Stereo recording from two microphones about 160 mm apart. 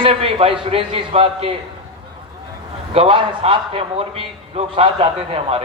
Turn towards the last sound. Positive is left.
turn(degrees=-40)  # may be behind; listen again after turning